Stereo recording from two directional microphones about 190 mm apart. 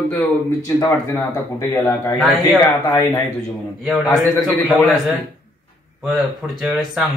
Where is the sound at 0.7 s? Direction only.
10° left (ahead or behind).